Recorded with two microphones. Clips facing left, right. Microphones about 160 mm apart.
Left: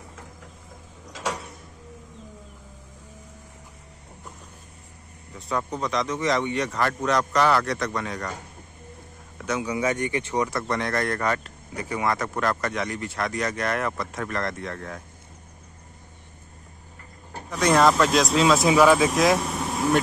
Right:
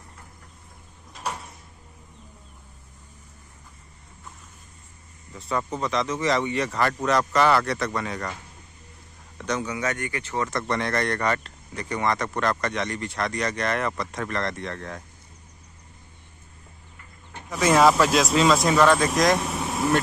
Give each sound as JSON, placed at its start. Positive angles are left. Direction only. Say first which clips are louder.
{"t": 1.0, "sound": "a sound", "louder": "left 2 dB", "side_deg": 90}
{"t": 5.3, "sound": "speech", "louder": "even", "side_deg": 0}
{"t": 9.4, "sound": "speech", "louder": "left 2 dB", "side_deg": 10}
{"t": 10.7, "sound": "speech", "louder": "even", "side_deg": 0}
{"t": 17.5, "sound": "speech", "louder": "right 1 dB", "side_deg": -5}